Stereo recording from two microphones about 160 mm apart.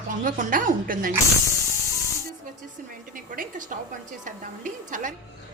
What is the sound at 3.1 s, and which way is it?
A woman's voice, 60° right (ahead or behind).